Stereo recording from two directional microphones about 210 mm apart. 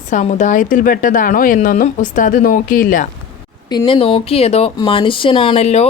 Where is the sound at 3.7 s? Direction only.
20° left (ahead or behind).